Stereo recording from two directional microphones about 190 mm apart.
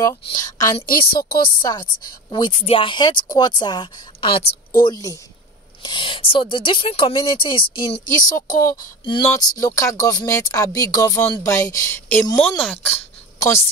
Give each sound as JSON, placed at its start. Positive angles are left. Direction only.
{"t": 0.0, "sound": "a woman's voice", "side_deg": 20}
{"t": 0.8, "sound": "a woman's voice", "side_deg": 50}
{"t": 1.6, "sound": "speech", "side_deg": 20}
{"t": 4.8, "sound": "speech", "side_deg": 20}